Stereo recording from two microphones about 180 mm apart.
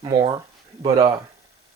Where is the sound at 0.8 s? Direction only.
30° right (ahead or behind).